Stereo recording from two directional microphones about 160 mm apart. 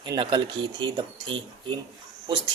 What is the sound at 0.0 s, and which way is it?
Speech, 30° right (ahead or behind).